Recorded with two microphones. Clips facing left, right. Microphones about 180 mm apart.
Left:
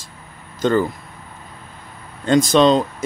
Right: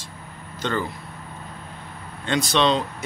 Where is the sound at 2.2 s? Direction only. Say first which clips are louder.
Left 8 dB; 40° left (ahead or behind).